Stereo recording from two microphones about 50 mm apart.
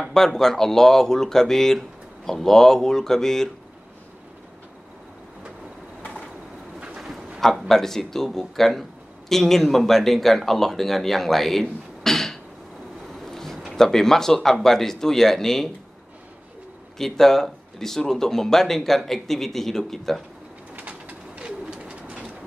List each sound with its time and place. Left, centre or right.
0.0 s speech: centre
7.3 s speech: centre
12.0 s a sound: centre
13.1 s vehicle: centre
13.7 s speech: centre
17.0 s speech: centre
20.7 s bird: right